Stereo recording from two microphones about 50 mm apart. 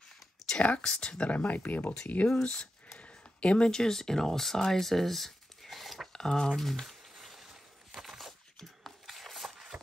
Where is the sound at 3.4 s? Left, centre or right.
Left.